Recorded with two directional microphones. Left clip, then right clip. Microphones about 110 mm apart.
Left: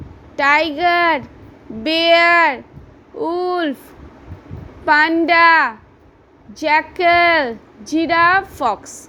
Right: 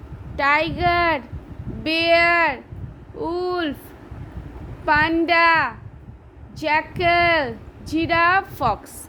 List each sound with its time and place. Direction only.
0.3 s a woman's voice: 30° left (ahead or behind)
4.9 s a woman's voice: 40° left (ahead or behind)